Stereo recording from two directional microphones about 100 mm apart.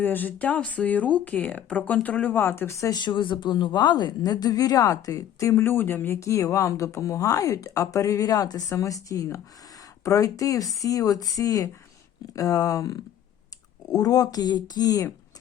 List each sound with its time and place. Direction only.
0.0 s speech: 20° left (ahead or behind)
2.9 s a woman's voice: 50° left (ahead or behind)